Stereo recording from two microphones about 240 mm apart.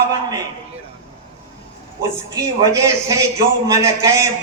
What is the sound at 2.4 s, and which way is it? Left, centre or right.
A man's voice, centre.